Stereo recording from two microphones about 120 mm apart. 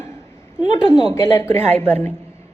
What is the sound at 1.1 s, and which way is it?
Speech, 20° left (ahead or behind).